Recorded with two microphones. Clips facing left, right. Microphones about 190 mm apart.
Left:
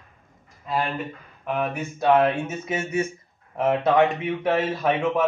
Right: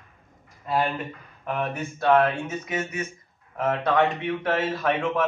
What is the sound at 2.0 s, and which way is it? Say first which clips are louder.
Speech: left 1 dB; 20° left (ahead or behind).